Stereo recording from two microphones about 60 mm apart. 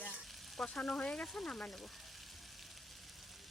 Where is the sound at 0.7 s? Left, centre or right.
Centre.